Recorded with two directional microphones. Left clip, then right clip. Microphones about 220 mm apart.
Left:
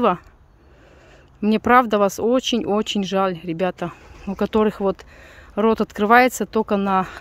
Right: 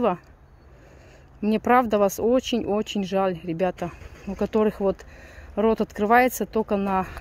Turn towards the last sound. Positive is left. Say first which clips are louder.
# left 4 dB
turn(degrees=15)  # may be behind; listen again after turning